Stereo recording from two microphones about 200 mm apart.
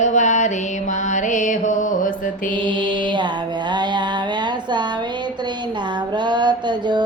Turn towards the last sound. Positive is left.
turn(degrees=-20)  # may be behind; listen again after turning